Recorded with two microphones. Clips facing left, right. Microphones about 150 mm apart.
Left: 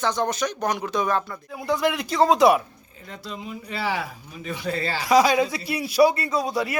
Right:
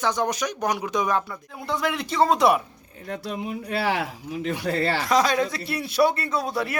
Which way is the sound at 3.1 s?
65° right (ahead or behind).